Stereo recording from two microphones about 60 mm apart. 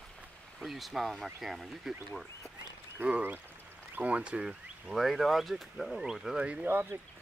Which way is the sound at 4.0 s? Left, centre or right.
Right.